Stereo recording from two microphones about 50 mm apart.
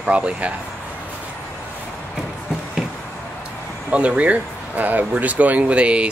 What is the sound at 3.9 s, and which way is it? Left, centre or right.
Speech, right.